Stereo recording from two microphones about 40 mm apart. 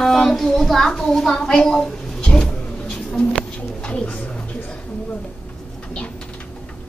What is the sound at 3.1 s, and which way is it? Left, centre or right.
Bird, left.